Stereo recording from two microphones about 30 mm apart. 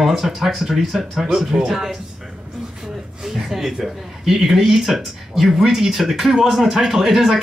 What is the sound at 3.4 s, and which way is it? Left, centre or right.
Speech, centre.